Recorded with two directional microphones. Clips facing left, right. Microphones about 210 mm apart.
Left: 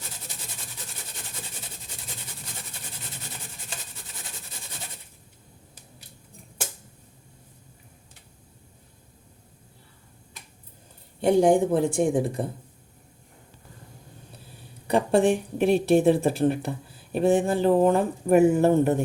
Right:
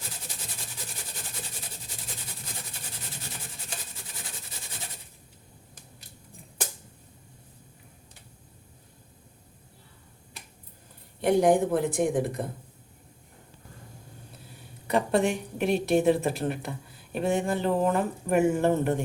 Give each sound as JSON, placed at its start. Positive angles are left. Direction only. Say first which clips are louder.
{"t": 11.2, "sound": "a woman's voice", "louder": "left 3 dB", "side_deg": 30}
{"t": 14.8, "sound": "a sound", "louder": "left 3 dB", "side_deg": 30}
{"t": 15.3, "sound": "speech", "louder": "left 6 dB", "side_deg": 30}
{"t": 15.7, "sound": "speech", "louder": "left 3 dB", "side_deg": 0}
{"t": 16.6, "sound": "speech", "louder": "left 5 dB", "side_deg": 30}